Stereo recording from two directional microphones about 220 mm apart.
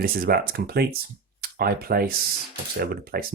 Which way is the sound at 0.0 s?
40° right (ahead or behind).